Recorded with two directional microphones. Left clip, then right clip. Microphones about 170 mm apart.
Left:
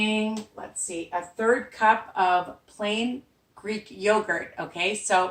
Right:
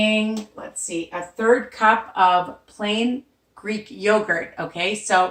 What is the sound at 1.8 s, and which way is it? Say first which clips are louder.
A woman's voice: right 3 dB; 15° left (ahead or behind).